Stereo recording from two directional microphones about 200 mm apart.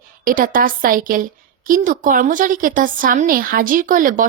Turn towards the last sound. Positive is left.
turn(degrees=-40)  # may be behind; listen again after turning